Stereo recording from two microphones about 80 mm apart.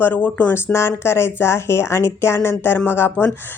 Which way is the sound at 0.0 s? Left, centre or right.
Left.